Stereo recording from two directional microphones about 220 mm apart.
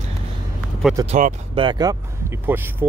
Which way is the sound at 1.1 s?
30° right (ahead or behind).